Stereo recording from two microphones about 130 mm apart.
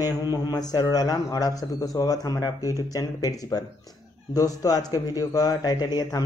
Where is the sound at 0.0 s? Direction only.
30° left (ahead or behind).